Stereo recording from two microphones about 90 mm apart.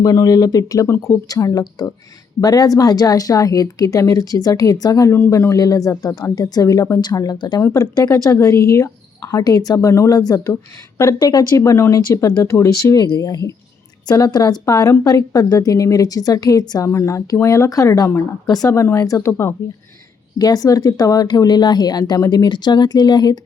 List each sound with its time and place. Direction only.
0.0 s speech: 40° left (ahead or behind)
0.9 s speech: 30° left (ahead or behind)
1.3 s a woman's voice: 40° left (ahead or behind)
5.1 s a woman's voice: 30° left (ahead or behind)
7.0 s a woman's voice: 45° left (ahead or behind)
13.1 s a woman's voice: 50° left (ahead or behind); by 19.5 s 25° left (ahead or behind)
20.4 s speech: 45° left (ahead or behind)